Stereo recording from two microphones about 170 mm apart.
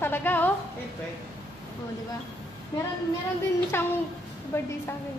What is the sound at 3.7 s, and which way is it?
Speech, 15° left (ahead or behind).